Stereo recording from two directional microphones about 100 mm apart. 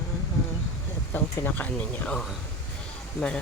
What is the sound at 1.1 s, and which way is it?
Speech, 20° left (ahead or behind).